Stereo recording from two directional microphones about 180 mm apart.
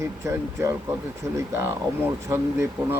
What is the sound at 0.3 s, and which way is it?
A man's voice, 15° right (ahead or behind).